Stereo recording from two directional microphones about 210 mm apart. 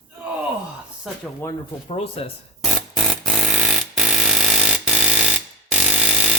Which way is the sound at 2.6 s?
Centre (ahead or behind).